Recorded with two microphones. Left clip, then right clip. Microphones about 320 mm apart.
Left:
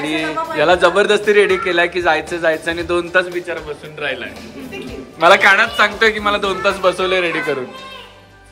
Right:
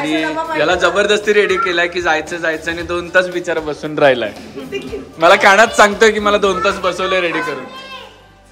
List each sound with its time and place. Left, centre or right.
0.0 s a man's voice: centre
5.2 s a man's voice: centre